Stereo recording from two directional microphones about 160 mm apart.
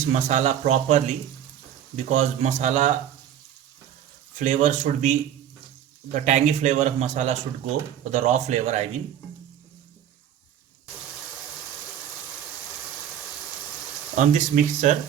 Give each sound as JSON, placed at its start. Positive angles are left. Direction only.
{"t": 0.0, "sound": "a man's voice", "side_deg": -45}
{"t": 4.4, "sound": "a man's voice", "side_deg": -50}
{"t": 6.1, "sound": "a man's voice", "side_deg": -50}
{"t": 14.2, "sound": "a man's voice", "side_deg": -50}